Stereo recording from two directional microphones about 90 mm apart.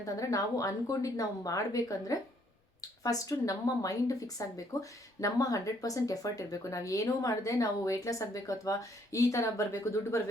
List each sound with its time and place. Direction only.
0.0 s speech: 40° left (ahead or behind)